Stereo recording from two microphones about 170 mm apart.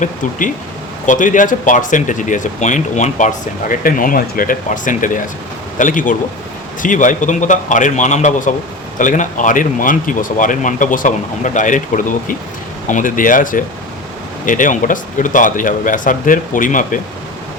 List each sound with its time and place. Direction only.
0.0 s speech: 50° left (ahead or behind)